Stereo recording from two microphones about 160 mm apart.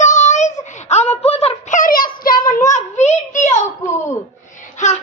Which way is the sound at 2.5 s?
50° left (ahead or behind).